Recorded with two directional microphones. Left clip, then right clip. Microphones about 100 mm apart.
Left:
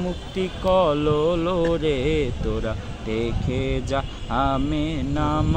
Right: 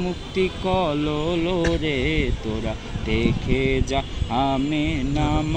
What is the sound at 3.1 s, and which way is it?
Mantra, 30° left (ahead or behind).